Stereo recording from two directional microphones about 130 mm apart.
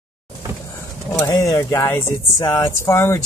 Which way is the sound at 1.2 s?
25° left (ahead or behind).